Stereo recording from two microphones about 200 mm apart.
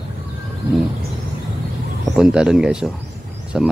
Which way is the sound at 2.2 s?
5° right (ahead or behind).